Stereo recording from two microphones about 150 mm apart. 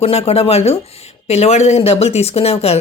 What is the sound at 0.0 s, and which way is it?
Speech, 45° left (ahead or behind).